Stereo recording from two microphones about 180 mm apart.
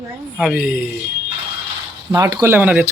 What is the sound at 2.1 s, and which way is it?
Speech, 20° right (ahead or behind).